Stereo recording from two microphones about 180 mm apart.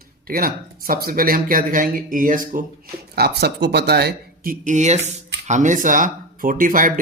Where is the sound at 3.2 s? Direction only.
60° right (ahead or behind).